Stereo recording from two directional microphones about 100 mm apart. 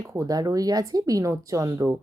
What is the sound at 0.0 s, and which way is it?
Speech, 30° right (ahead or behind).